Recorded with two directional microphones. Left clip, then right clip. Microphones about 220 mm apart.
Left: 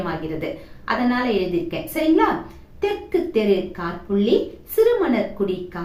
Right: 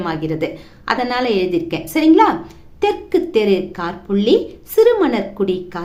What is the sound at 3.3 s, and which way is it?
A woman's voice, 50° right (ahead or behind).